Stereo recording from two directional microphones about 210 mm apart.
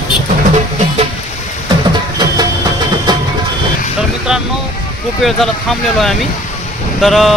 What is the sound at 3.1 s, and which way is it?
Vehicle, 20° right (ahead or behind).